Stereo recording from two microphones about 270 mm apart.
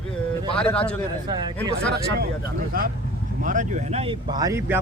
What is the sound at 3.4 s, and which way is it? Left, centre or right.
Speech, right.